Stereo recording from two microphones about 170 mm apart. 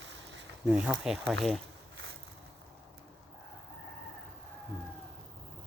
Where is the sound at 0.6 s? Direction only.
5° right (ahead or behind).